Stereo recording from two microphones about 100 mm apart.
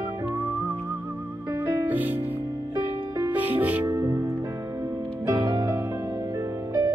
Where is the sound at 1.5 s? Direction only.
30° right (ahead or behind).